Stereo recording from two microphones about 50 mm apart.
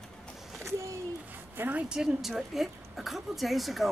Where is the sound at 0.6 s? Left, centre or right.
Right.